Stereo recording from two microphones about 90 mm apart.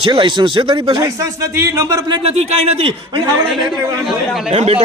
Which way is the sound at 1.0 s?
35° right (ahead or behind).